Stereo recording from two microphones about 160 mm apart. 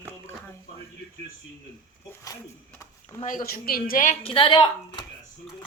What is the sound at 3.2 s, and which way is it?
Speech, 60° left (ahead or behind).